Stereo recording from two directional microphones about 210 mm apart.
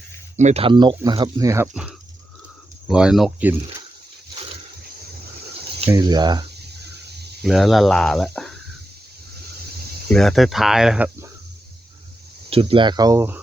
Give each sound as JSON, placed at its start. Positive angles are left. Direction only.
{"t": 0.3, "sound": "speech", "side_deg": -30}
{"t": 1.6, "sound": "speech", "side_deg": -5}
{"t": 5.9, "sound": "speech", "side_deg": -20}
{"t": 6.9, "sound": "cricket", "side_deg": -50}
{"t": 7.4, "sound": "speech", "side_deg": 0}
{"t": 10.1, "sound": "speech", "side_deg": 0}
{"t": 12.5, "sound": "speech", "side_deg": -25}